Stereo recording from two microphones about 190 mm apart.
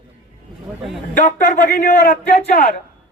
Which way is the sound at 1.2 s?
40° left (ahead or behind).